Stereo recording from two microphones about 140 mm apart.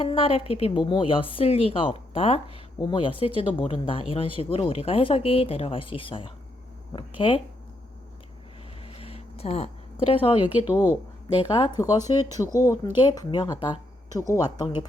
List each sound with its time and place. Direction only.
0.0 s a woman's voice: 40° left (ahead or behind)
8.8 s a sound: 45° left (ahead or behind)
10.1 s a woman's voice: 40° left (ahead or behind); by 14.8 s 25° left (ahead or behind)